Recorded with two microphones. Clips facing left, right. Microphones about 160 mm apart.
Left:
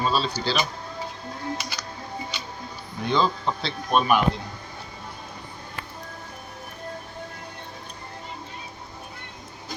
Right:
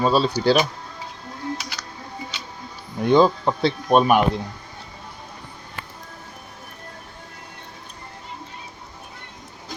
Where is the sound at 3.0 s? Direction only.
50° right (ahead or behind).